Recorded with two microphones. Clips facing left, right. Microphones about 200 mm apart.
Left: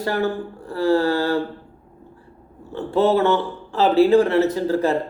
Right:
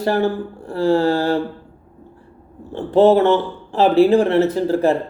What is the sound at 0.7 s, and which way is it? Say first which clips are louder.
Speech: right 2 dB; 15° right (ahead or behind).